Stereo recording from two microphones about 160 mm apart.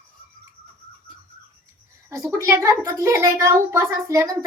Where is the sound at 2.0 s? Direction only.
20° right (ahead or behind).